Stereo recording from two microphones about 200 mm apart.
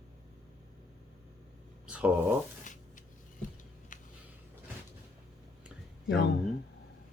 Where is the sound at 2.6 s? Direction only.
40° left (ahead or behind).